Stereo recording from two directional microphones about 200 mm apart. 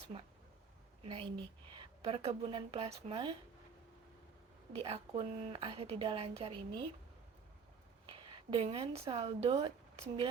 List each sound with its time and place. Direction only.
0.1 s a woman's voice: 30° right (ahead or behind)
4.8 s a woman's voice: 25° right (ahead or behind)
8.5 s a woman's voice: 30° right (ahead or behind)